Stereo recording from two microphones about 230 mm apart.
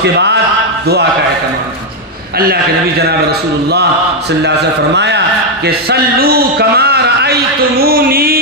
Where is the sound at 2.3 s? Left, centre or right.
Right.